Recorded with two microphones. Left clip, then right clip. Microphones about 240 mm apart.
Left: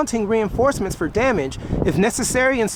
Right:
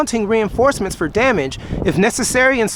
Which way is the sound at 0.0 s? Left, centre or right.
Centre.